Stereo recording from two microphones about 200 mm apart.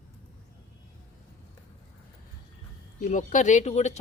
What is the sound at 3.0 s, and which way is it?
Speech, 40° left (ahead or behind).